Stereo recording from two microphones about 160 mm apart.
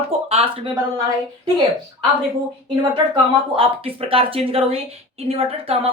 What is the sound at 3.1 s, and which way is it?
Speech, 35° right (ahead or behind).